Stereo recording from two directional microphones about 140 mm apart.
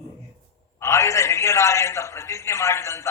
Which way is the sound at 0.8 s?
20° left (ahead or behind).